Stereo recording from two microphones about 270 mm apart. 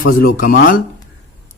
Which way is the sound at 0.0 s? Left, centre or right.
Left.